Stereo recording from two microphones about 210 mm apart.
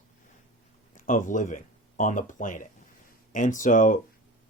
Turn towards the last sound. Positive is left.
turn(degrees=40)  # may be behind; listen again after turning